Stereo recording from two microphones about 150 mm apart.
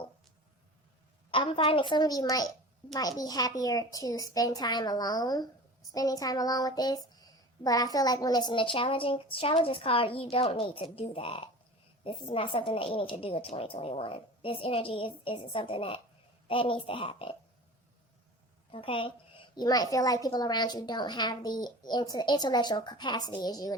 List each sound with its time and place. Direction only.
1.3 s a woman's voice: 35° left (ahead or behind)
18.7 s a woman's voice: 35° left (ahead or behind)
19.5 s a woman's voice: 25° left (ahead or behind)